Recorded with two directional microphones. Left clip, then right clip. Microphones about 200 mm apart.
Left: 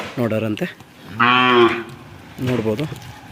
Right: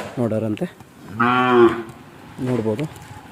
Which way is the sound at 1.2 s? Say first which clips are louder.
Left 2 dB; 50° right (ahead or behind).